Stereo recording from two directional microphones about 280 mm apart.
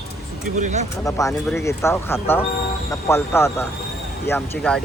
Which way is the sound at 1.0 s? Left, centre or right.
Centre.